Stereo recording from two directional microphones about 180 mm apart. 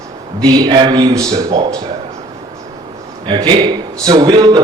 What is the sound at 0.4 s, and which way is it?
Speech, 20° right (ahead or behind).